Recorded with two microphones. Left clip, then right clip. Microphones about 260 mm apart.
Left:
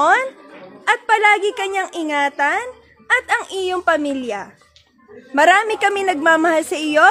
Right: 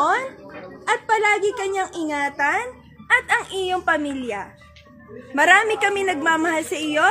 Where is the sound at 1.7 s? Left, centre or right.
Left.